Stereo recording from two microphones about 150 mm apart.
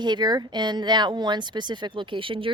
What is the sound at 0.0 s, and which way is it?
Speech, 30° right (ahead or behind).